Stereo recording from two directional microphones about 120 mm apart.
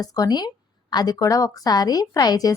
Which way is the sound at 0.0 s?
35° left (ahead or behind).